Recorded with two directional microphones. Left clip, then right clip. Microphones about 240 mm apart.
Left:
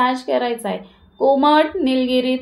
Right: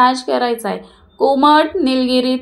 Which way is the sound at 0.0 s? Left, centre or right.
Right.